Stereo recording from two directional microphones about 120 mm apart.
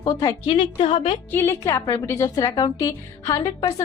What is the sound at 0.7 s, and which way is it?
Speech, 50° left (ahead or behind).